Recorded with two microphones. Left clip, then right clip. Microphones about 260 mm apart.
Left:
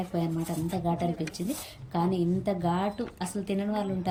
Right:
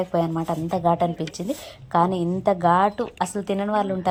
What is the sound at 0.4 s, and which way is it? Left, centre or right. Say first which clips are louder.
Speech: right 10 dB; right.